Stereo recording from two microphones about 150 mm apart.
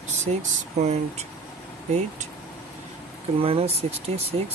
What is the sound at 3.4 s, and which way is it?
Speech, 40° right (ahead or behind).